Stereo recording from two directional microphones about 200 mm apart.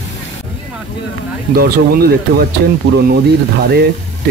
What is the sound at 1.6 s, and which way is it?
Speech, 50° right (ahead or behind).